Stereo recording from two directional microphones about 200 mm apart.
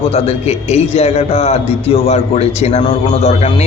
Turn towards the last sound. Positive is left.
turn(degrees=30)  # may be behind; listen again after turning